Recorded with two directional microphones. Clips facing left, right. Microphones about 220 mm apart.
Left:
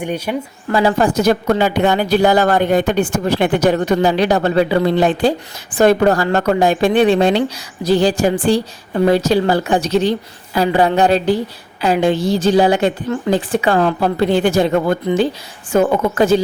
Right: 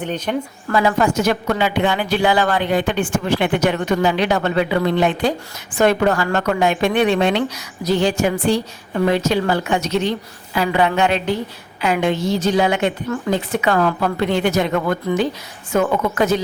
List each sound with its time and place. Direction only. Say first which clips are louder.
0.0 s speech: left 2 dB; 10° left (ahead or behind)
0.7 s a woman's voice: left 2 dB; 30° left (ahead or behind)